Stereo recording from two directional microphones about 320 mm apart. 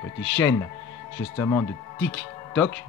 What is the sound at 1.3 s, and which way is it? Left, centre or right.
Speech, centre.